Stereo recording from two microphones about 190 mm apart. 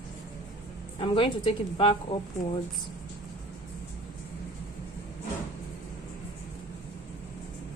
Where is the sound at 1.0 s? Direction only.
30° left (ahead or behind).